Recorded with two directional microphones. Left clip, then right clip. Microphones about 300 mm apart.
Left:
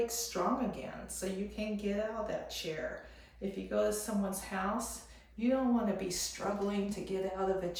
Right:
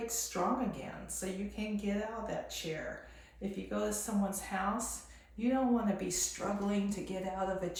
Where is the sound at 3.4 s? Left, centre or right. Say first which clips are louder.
Left 4 dB; centre.